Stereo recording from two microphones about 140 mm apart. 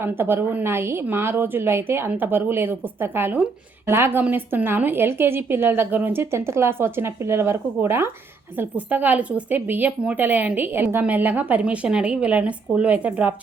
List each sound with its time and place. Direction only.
0.0 s a woman's voice: 15° right (ahead or behind)